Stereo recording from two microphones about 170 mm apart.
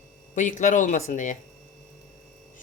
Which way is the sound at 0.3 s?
45° left (ahead or behind).